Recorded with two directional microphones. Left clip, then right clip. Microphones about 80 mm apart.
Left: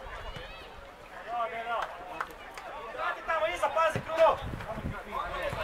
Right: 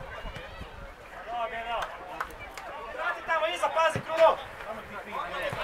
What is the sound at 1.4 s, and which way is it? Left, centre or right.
Chop, centre.